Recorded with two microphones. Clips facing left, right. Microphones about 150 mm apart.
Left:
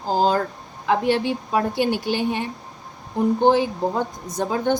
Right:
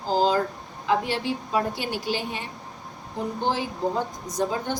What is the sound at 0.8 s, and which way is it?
Speech, 60° left (ahead or behind).